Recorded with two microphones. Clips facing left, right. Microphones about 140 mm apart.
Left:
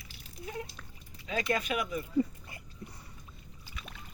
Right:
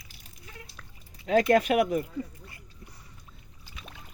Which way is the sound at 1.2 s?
65° right (ahead or behind).